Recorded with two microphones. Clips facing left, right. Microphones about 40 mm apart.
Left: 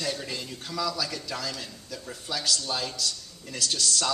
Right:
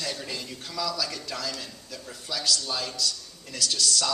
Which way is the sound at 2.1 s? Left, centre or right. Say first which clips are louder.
Right 1 dB; centre.